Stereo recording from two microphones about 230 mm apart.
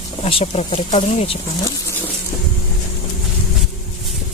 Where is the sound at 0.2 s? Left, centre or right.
Left.